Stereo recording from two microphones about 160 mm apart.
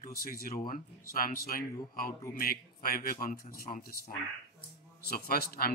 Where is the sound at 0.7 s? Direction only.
60° left (ahead or behind).